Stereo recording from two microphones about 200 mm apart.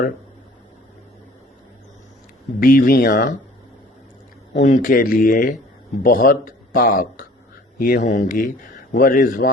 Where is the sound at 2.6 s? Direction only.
45° left (ahead or behind).